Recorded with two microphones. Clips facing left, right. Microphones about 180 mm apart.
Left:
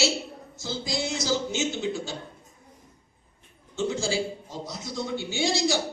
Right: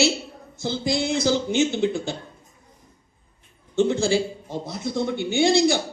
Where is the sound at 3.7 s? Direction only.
55° right (ahead or behind).